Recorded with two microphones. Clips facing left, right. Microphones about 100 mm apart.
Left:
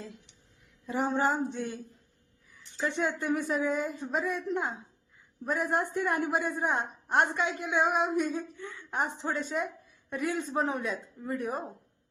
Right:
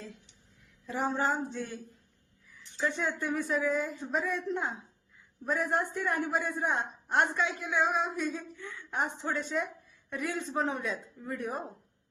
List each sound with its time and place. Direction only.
0.9 s speech: 20° left (ahead or behind)